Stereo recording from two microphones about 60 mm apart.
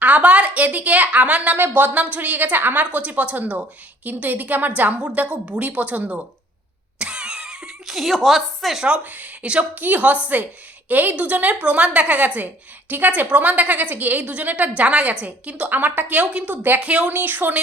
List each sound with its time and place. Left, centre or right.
0.0 s a woman's voice: right
1.5 s a woman's voice: right
7.0 s a sound: centre
8.9 s a woman's voice: right